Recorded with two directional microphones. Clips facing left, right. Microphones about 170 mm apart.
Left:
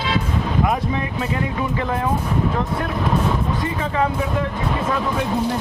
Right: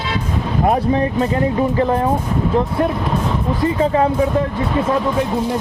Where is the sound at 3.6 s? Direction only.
30° right (ahead or behind).